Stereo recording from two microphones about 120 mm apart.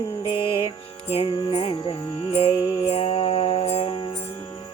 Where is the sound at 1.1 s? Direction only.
45° left (ahead or behind).